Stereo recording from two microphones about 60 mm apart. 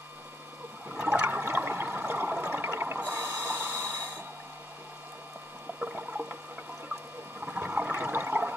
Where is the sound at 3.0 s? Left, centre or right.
Right.